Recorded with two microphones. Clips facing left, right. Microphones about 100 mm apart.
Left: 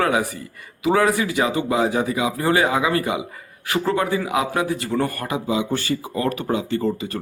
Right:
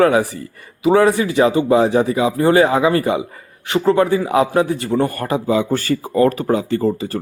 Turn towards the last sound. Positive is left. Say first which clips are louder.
# right 4 dB
turn(degrees=-35)  # may be behind; listen again after turning